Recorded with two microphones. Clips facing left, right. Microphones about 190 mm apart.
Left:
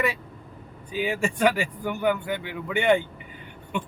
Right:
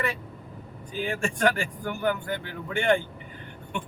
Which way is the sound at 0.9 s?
5° left (ahead or behind).